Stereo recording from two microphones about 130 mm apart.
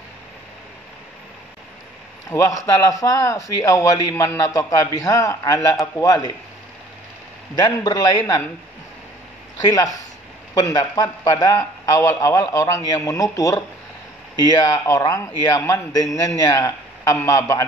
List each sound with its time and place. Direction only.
2.2 s a man's voice: 25° left (ahead or behind)
7.5 s a man's voice: 30° left (ahead or behind)
10.5 s a man's voice: 30° left (ahead or behind)